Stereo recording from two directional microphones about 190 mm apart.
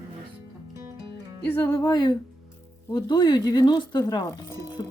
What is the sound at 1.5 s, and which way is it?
Speech, 15° left (ahead or behind).